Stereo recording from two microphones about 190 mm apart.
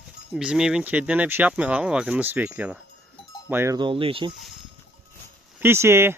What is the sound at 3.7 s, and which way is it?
Speech, 25° right (ahead or behind).